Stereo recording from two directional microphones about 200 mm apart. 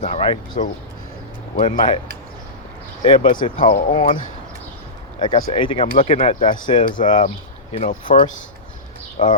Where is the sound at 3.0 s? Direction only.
25° left (ahead or behind).